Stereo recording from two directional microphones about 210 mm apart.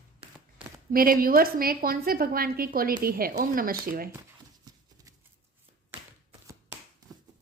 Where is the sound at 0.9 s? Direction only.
45° right (ahead or behind).